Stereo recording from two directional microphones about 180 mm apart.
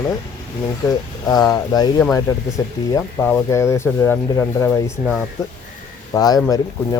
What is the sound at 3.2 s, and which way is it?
Speech, 15° left (ahead or behind).